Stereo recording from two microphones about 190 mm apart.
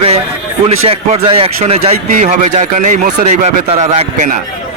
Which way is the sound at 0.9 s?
30° right (ahead or behind).